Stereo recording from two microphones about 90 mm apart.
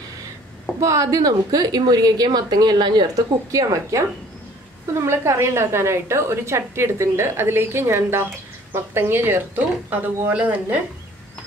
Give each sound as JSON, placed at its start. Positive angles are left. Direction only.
{"t": 0.7, "sound": "a woman's voice", "side_deg": -35}
{"t": 3.5, "sound": "a woman's voice", "side_deg": -40}
{"t": 5.0, "sound": "a woman's voice", "side_deg": -30}